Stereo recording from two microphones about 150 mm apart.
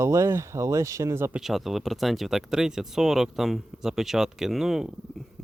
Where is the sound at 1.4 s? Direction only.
Centre (ahead or behind).